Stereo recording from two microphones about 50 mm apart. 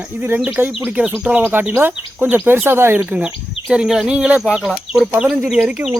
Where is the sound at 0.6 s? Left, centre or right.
Right.